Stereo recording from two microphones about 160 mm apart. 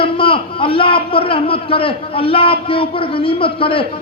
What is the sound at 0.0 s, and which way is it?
A man's voice, 35° left (ahead or behind).